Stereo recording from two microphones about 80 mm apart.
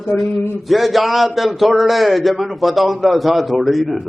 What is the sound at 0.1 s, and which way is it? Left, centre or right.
A man's voice, centre.